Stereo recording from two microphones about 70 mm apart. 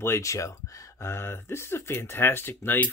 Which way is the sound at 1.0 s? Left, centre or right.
Left.